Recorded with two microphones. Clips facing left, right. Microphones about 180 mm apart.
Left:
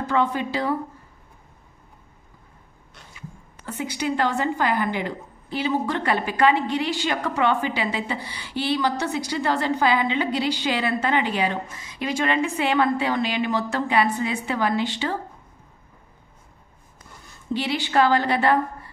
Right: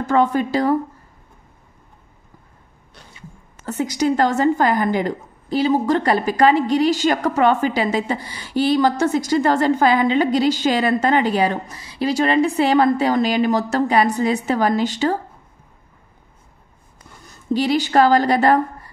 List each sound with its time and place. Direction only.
0.0 s speech: 45° right (ahead or behind)
3.5 s a woman's voice: 40° right (ahead or behind)
17.5 s a woman's voice: 40° right (ahead or behind)